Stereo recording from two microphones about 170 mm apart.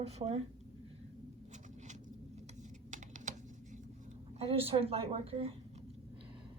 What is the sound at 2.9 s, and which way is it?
Patter, 45° right (ahead or behind).